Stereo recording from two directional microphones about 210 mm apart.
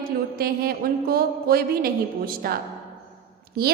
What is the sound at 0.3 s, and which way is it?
A woman's voice, 45° right (ahead or behind).